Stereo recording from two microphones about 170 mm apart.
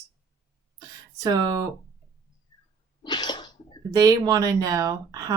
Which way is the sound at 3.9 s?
20° right (ahead or behind).